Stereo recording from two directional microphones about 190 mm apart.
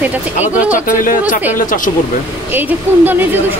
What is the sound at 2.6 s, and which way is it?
Speech, 10° right (ahead or behind).